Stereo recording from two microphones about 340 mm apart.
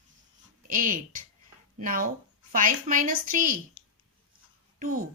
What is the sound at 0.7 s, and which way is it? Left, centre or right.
Speech, right.